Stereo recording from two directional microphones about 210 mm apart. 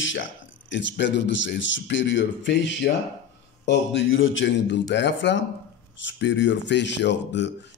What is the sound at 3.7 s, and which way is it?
Speech, 55° left (ahead or behind).